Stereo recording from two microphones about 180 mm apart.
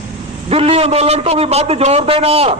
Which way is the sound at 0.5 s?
35° right (ahead or behind).